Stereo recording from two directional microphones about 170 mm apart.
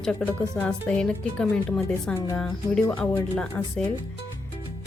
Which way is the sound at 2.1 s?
15° left (ahead or behind).